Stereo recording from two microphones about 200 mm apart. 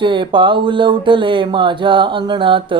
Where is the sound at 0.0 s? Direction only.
25° right (ahead or behind).